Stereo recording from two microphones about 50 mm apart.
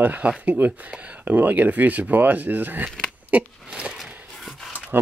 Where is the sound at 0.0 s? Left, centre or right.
Right.